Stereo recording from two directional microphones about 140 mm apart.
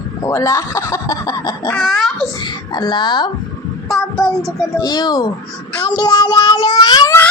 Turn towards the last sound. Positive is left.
turn(degrees=30)  # may be behind; listen again after turning